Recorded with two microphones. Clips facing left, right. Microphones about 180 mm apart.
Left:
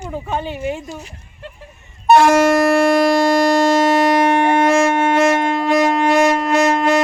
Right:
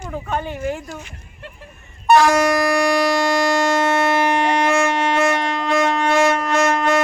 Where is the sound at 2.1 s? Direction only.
20° left (ahead or behind).